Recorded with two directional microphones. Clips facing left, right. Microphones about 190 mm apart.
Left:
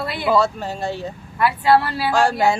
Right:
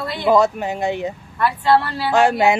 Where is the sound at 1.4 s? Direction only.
5° left (ahead or behind).